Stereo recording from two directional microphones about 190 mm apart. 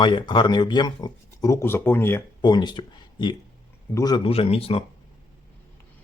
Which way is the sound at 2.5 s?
25° left (ahead or behind).